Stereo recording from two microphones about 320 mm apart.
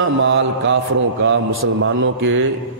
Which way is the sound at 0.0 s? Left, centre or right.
Right.